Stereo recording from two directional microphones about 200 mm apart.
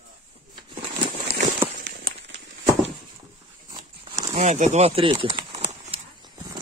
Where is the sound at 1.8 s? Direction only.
55° right (ahead or behind).